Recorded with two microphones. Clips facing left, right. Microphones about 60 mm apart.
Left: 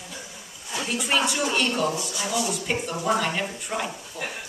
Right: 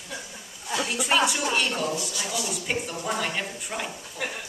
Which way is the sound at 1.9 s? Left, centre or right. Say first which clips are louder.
Left 2 dB; left.